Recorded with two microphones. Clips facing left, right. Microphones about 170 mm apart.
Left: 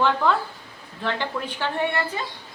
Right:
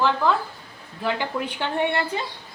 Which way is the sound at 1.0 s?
15° right (ahead or behind).